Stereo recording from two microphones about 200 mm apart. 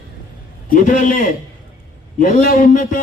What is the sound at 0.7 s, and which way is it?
A man's voice, 40° left (ahead or behind).